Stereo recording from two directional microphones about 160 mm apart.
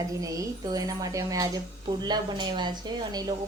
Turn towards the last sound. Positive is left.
turn(degrees=-25)  # may be behind; listen again after turning